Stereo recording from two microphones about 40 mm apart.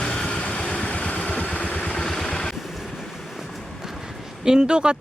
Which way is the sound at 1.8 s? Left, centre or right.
Left.